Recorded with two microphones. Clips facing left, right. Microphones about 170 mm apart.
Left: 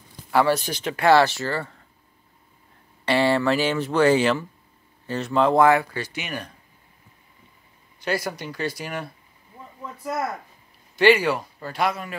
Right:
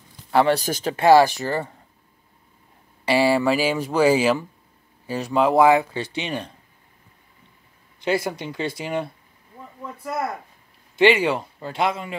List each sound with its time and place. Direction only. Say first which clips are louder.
0.3 s speech: right 2 dB; 20° right (ahead or behind)
0.6 s speech: right 4 dB; 40° right (ahead or behind)
0.9 s speech: right 3 dB; 15° right (ahead or behind)
3.1 s speech: right 2 dB; 10° right (ahead or behind)
5.9 s a man's voice: right 4 dB; 25° right (ahead or behind)
8.0 s a man's voice: right 3 dB; 25° right (ahead or behind)
11.0 s a man's voice: even; 25° right (ahead or behind)